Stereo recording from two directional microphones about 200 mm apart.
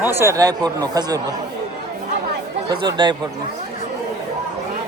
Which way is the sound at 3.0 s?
20° right (ahead or behind).